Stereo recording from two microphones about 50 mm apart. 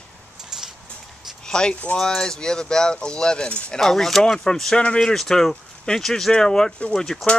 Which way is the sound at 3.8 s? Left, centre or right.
Centre.